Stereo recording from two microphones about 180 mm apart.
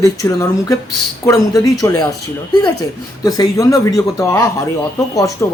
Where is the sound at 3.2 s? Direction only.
20° left (ahead or behind).